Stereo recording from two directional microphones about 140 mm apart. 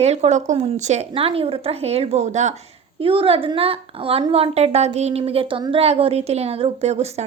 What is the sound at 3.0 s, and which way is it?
A woman's voice, 40° right (ahead or behind).